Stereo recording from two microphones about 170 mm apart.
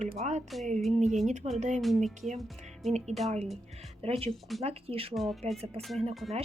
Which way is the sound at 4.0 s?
35° right (ahead or behind).